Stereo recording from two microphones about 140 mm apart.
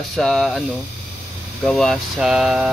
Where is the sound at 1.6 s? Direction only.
5° left (ahead or behind).